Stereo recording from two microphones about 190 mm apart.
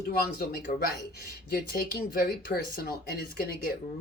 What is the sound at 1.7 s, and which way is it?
Speech, 50° left (ahead or behind).